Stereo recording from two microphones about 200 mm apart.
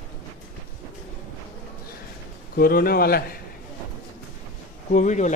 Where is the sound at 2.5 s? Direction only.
50° left (ahead or behind).